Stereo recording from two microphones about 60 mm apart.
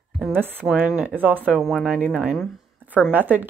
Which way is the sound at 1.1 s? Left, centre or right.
Right.